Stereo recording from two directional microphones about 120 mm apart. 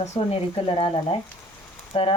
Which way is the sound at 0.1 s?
55° left (ahead or behind).